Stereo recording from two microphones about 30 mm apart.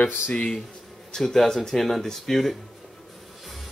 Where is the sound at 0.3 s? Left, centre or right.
Left.